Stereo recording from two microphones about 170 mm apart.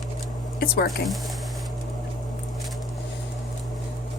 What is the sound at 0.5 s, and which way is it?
Speech, 65° left (ahead or behind).